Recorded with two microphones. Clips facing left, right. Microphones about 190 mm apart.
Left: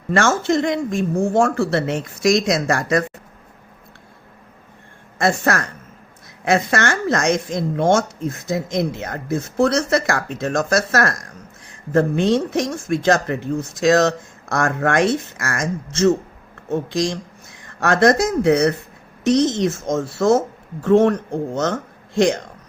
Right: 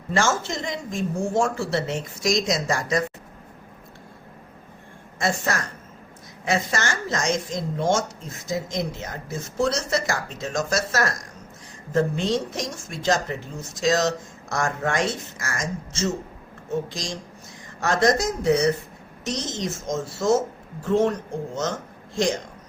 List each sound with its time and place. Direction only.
0.1 s speech: 60° left (ahead or behind)
5.2 s speech: 60° left (ahead or behind)